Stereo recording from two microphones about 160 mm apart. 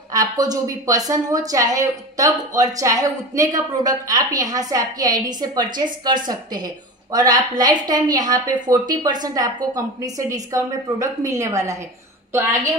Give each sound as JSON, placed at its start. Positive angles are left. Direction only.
{"t": 0.1, "sound": "a woman's voice", "side_deg": -25}